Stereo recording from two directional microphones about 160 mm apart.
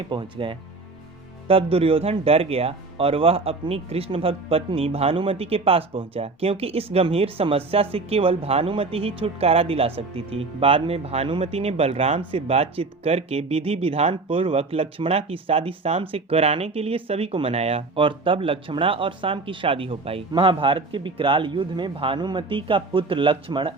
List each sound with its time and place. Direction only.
0.1 s speech: 30° right (ahead or behind)